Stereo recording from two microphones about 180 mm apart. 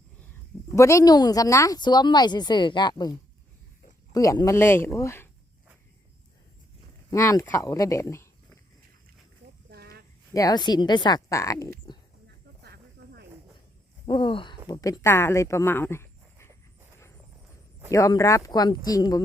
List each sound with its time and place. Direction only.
0.7 s a woman's voice: 15° left (ahead or behind)
7.1 s speech: 15° left (ahead or behind)
9.6 s a sound: 60° right (ahead or behind)
10.3 s a woman's voice: 20° left (ahead or behind)
12.6 s snake: 65° right (ahead or behind)
14.1 s a woman's voice: 30° left (ahead or behind)
17.9 s a woman's voice: 20° left (ahead or behind)